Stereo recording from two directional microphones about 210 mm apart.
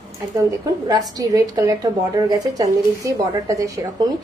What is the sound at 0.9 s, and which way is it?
A woman's voice, 20° right (ahead or behind).